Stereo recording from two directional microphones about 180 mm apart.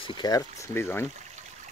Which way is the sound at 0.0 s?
25° left (ahead or behind).